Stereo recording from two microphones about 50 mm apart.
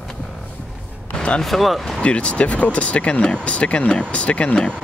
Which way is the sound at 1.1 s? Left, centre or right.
Left.